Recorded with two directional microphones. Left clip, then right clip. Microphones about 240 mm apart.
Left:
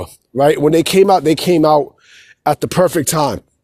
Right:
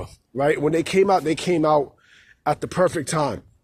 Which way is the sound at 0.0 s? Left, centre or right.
Left.